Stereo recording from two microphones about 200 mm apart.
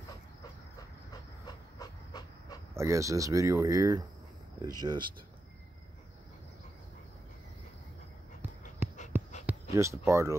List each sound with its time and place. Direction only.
1.4 s pant: 20° left (ahead or behind)
2.7 s speech: 15° right (ahead or behind)
8.8 s dog: 10° right (ahead or behind)
9.5 s speech: 15° right (ahead or behind)